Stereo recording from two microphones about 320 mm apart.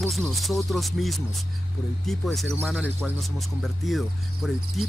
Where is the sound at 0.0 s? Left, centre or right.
Centre.